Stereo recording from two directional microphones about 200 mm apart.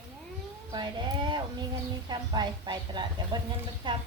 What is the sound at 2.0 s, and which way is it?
A woman's voice, 20° right (ahead or behind).